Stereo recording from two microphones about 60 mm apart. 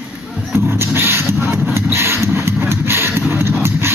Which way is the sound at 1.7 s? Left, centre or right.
Right.